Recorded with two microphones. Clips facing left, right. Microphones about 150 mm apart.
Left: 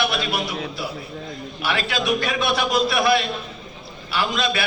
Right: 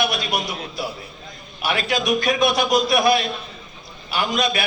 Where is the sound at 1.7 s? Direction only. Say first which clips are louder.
Right 2 dB; 20° right (ahead or behind).